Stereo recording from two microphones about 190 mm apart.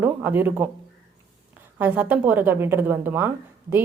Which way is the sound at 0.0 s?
10° right (ahead or behind).